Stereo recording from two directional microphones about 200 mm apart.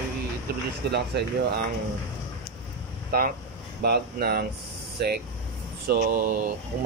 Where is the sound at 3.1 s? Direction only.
45° right (ahead or behind).